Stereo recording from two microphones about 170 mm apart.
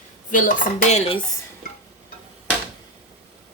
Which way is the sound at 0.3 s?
50° left (ahead or behind).